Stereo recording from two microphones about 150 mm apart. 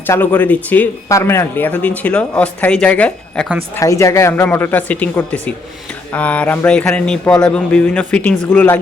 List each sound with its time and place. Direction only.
0.1 s speech: 15° left (ahead or behind)
3.8 s speech: 20° left (ahead or behind)